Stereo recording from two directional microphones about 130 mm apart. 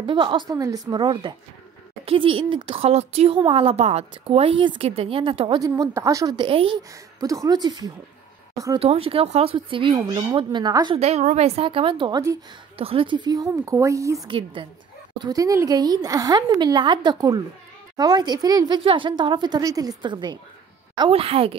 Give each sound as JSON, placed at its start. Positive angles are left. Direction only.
{"t": 0.0, "sound": "speech", "side_deg": -40}
{"t": 0.5, "sound": "speech", "side_deg": -25}
{"t": 5.6, "sound": "a woman's voice", "side_deg": -25}
{"t": 6.3, "sound": "speech", "side_deg": -40}
{"t": 7.2, "sound": "a woman's voice", "side_deg": -30}
{"t": 8.7, "sound": "speech", "side_deg": -50}
{"t": 11.0, "sound": "a woman's voice", "side_deg": -55}
{"t": 14.2, "sound": "speech", "side_deg": -40}
{"t": 15.1, "sound": "speech", "side_deg": -30}
{"t": 21.1, "sound": "speech", "side_deg": -50}